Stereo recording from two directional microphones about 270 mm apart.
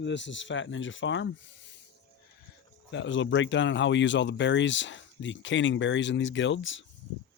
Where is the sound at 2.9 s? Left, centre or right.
Left.